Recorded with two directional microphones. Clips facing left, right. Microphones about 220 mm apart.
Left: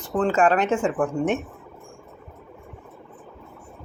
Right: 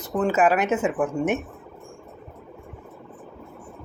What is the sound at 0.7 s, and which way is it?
Speech, 20° right (ahead or behind).